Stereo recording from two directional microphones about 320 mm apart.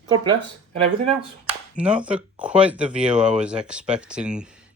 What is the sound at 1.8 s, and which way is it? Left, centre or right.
Speech, centre.